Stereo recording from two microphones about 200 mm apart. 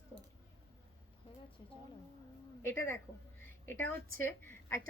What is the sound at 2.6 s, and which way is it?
A woman's voice, 10° left (ahead or behind).